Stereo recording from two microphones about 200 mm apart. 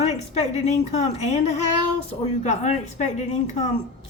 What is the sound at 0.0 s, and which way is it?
A woman's voice, 35° left (ahead or behind).